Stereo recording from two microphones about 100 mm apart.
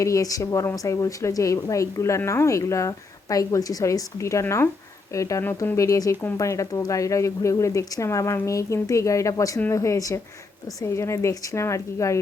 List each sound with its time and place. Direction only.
0.0 s a woman's voice: 35° left (ahead or behind)